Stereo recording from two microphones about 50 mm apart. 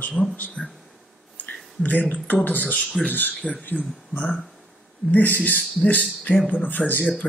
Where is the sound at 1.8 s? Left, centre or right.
Left.